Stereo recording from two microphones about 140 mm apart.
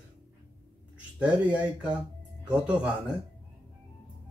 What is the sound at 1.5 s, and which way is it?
A man's voice, 5° right (ahead or behind).